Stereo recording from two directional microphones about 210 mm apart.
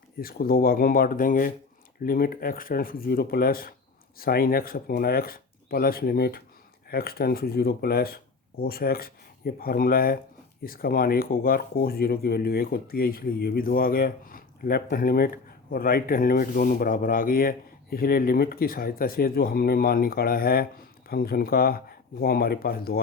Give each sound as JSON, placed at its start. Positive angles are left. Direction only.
{"t": 0.2, "sound": "speech", "side_deg": 45}